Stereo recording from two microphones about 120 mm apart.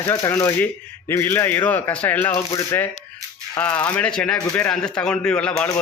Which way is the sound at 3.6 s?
10° left (ahead or behind).